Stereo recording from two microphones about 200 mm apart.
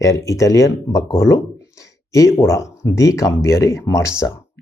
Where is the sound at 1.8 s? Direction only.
15° left (ahead or behind).